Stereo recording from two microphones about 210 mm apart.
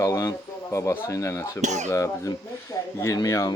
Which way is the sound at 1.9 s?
15° left (ahead or behind).